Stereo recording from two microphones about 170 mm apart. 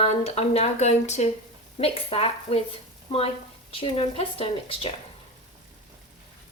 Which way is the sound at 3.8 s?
35° left (ahead or behind).